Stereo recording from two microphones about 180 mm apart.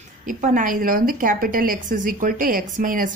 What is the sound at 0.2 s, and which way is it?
A woman's voice, 45° right (ahead or behind).